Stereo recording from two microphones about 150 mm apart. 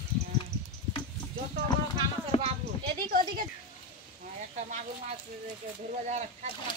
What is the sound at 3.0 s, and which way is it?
Speech, 70° right (ahead or behind).